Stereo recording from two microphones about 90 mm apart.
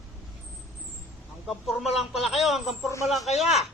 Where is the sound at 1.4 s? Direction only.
Centre (ahead or behind).